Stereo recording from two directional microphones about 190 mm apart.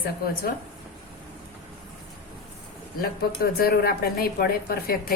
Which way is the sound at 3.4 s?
50° left (ahead or behind).